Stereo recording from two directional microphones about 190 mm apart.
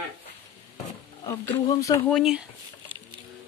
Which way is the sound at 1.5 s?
20° left (ahead or behind).